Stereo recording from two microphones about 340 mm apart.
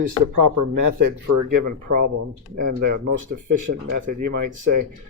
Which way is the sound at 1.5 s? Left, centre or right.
Right.